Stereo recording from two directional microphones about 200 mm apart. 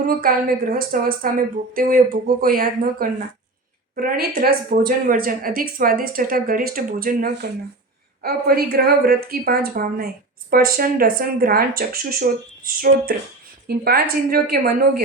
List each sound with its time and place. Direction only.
0.0 s speech: 45° right (ahead or behind)
13.7 s speech: 50° right (ahead or behind)